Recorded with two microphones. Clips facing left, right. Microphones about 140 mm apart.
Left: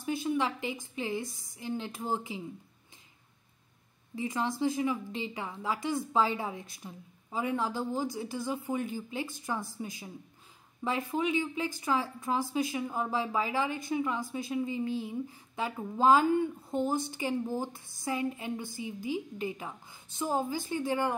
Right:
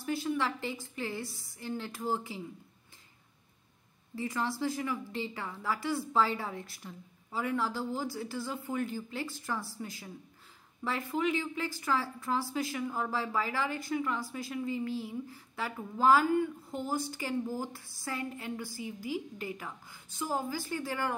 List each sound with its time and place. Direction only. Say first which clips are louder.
0.0 s a woman's voice: left 2 dB; 20° left (ahead or behind)
4.1 s a woman's voice: left 1 dB; 20° left (ahead or behind)